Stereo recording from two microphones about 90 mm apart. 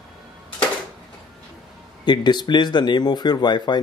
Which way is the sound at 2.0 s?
55° left (ahead or behind).